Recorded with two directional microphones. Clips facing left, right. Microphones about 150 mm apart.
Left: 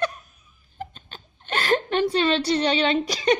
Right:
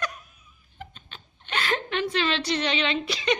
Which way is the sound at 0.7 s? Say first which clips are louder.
Left 6 dB; 40° left (ahead or behind).